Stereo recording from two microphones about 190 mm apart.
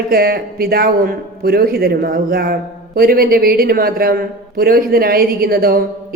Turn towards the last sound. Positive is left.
turn(degrees=-50)  # may be behind; listen again after turning